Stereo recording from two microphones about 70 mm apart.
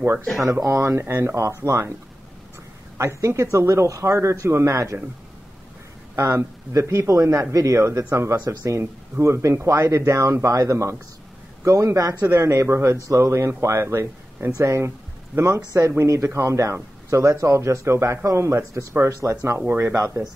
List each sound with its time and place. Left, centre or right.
0.4 s speech: right
3.0 s a man's voice: right
6.1 s a man's voice: right